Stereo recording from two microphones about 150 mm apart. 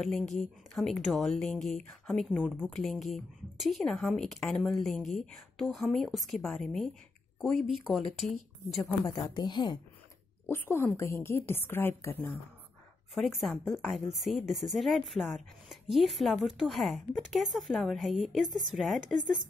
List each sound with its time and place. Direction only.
0.0 s speech: centre (ahead or behind)
9.0 s speech: 25° left (ahead or behind)
10.5 s a woman's voice: 15° left (ahead or behind)
13.1 s speech: centre (ahead or behind)